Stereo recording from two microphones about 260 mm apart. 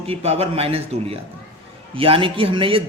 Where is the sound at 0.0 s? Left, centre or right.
Right.